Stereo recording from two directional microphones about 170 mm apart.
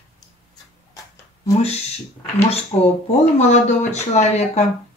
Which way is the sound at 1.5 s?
40° left (ahead or behind).